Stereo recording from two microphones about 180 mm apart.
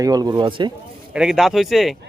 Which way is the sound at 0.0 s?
20° right (ahead or behind).